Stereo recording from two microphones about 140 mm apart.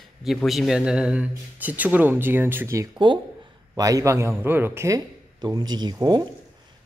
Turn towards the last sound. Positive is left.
turn(degrees=-30)  # may be behind; listen again after turning